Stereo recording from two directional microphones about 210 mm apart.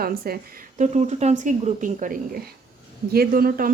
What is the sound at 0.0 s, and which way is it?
Speech, 45° right (ahead or behind).